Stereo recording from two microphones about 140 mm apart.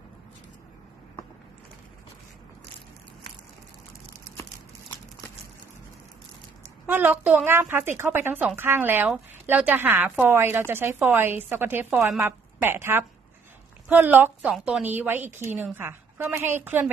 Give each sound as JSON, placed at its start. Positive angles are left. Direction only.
{"t": 6.9, "sound": "a woman's voice", "side_deg": -15}